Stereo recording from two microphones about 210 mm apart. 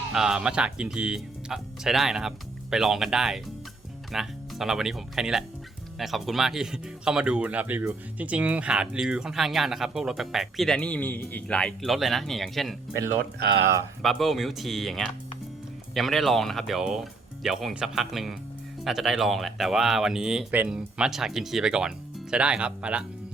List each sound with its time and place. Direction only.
0.1 s speech: 5° right (ahead or behind)
13.4 s speech: 50° right (ahead or behind)
14.0 s speech: centre (ahead or behind)